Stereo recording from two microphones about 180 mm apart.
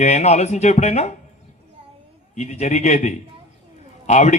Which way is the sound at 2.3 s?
40° left (ahead or behind).